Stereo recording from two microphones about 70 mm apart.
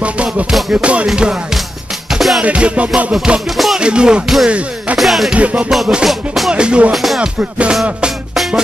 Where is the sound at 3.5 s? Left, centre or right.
Centre.